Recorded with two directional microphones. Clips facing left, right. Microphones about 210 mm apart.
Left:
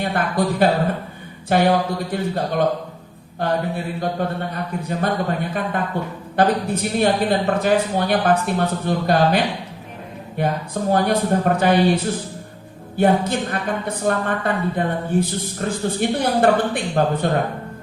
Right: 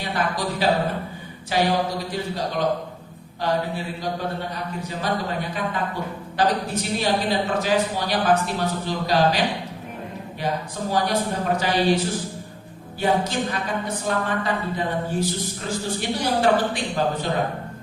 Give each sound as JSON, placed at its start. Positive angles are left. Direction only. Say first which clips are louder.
{"t": 0.0, "sound": "a woman's voice", "louder": "left 5 dB", "side_deg": 55}
{"t": 10.4, "sound": "a woman's voice", "louder": "left 5 dB", "side_deg": 55}
{"t": 13.0, "sound": "a woman's voice", "louder": "left 5 dB", "side_deg": 55}